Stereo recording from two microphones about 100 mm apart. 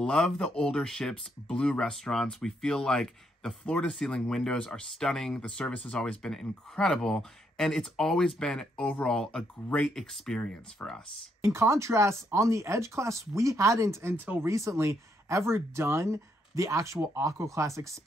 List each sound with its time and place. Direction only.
0.0 s speech: 10° left (ahead or behind)
11.4 s speech: 30° right (ahead or behind)
14.5 s speech: 30° right (ahead or behind)